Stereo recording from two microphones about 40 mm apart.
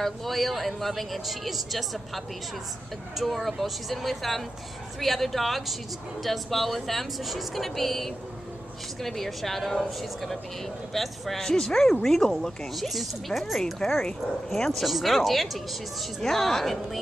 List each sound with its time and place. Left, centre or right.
0.0 s a woman's voice: centre
12.7 s speech: centre
13.7 s a woman's voice: centre
14.5 s speech: centre